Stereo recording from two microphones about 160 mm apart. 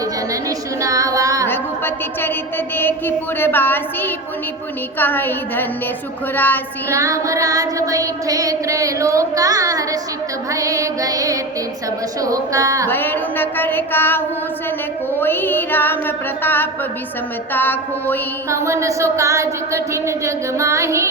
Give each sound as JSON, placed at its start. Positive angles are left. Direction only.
{"t": 0.8, "sound": "music", "side_deg": -20}
{"t": 1.5, "sound": "a sound", "side_deg": 15}
{"t": 2.7, "sound": "music", "side_deg": 15}
{"t": 6.9, "sound": "child singing", "side_deg": -20}
{"t": 12.9, "sound": "music", "side_deg": 10}
{"t": 15.2, "sound": "music", "side_deg": 15}
{"t": 18.5, "sound": "child singing", "side_deg": -20}